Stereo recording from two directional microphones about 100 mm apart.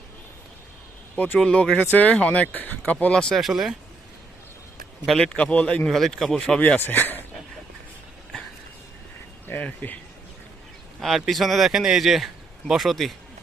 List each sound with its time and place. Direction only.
1.1 s speech: 15° left (ahead or behind)
5.0 s speech: 5° left (ahead or behind)
9.5 s speech: 15° left (ahead or behind)
11.0 s speech: centre (ahead or behind)